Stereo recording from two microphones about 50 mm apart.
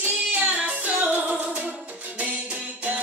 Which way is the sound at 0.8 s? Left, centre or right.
Right.